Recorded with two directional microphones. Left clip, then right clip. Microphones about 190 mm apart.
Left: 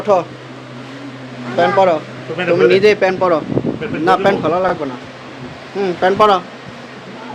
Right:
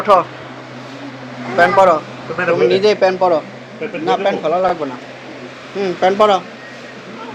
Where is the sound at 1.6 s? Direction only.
15° left (ahead or behind).